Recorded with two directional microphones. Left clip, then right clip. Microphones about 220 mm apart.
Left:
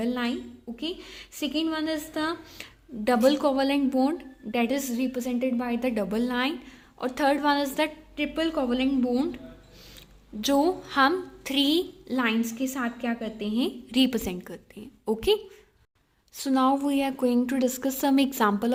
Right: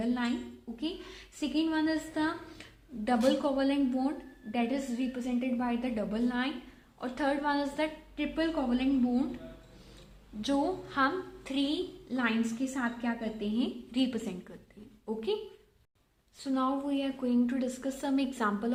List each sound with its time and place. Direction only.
0.0 s a sound: 50° left (ahead or behind)
0.8 s a woman's voice: 50° left (ahead or behind)
10.4 s a woman's voice: 50° left (ahead or behind)
16.4 s a woman's voice: 50° left (ahead or behind)